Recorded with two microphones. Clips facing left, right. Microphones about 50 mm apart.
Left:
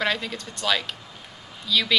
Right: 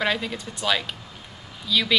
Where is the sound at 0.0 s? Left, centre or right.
Centre.